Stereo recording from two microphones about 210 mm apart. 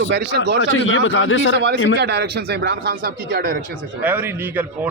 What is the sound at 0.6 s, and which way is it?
Speech, 70° left (ahead or behind).